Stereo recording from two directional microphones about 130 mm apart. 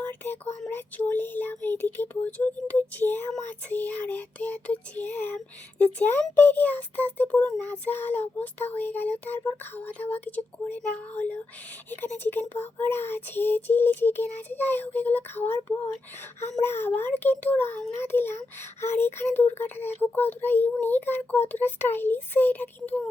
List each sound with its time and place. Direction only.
0.0 s a sound: 15° left (ahead or behind)
0.7 s child singing: 15° left (ahead or behind)
16.6 s child singing: 15° left (ahead or behind)